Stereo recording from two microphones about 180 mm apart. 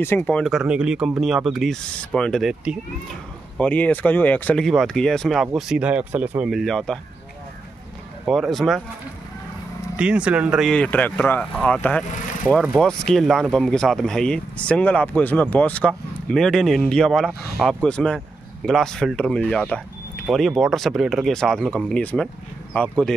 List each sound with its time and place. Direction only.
0.0 s speech: 10° left (ahead or behind)
3.5 s speech: 10° left (ahead or behind)
8.3 s speech: centre (ahead or behind)
9.9 s speech: 5° right (ahead or behind)